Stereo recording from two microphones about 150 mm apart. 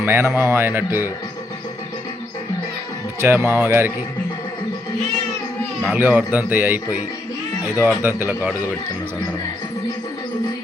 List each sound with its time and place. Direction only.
0.0 s speech: 15° right (ahead or behind)
3.2 s speech: 15° right (ahead or behind)
5.9 s speech: 15° right (ahead or behind)